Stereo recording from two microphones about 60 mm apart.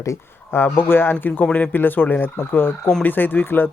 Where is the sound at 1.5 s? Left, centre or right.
Left.